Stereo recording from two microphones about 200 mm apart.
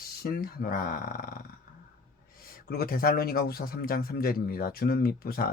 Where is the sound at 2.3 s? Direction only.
45° left (ahead or behind).